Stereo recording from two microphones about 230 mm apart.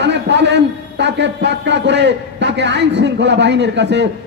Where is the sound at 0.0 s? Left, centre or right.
Right.